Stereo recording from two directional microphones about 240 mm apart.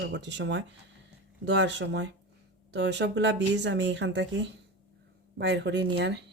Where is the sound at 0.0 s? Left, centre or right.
Right.